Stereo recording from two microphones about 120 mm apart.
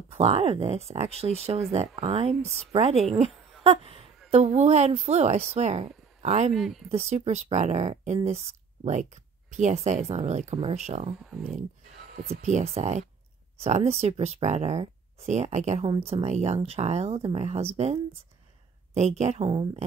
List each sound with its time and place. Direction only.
0.1 s speech: 55° right (ahead or behind)
3.3 s a sound: 5° left (ahead or behind)
3.6 s speech: 55° right (ahead or behind)
4.3 s speech: 70° right (ahead or behind)
6.5 s speech: centre (ahead or behind)
6.9 s speech: 65° right (ahead or behind)
8.8 s speech: 80° right
12.3 s speech: 80° right
16.1 s speech: 60° right (ahead or behind)